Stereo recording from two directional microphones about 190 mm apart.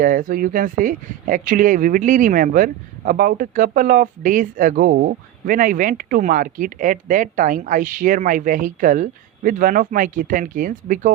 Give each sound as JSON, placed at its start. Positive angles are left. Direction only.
{"t": 0.0, "sound": "speech", "side_deg": -45}